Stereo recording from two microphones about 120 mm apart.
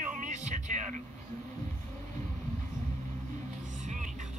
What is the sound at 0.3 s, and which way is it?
Music, 80° right.